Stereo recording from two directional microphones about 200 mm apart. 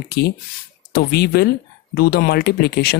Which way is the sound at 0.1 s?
55° left (ahead or behind).